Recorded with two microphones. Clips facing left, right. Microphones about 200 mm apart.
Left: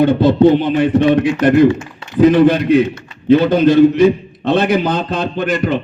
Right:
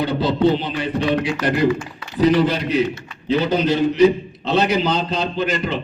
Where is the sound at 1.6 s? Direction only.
25° left (ahead or behind).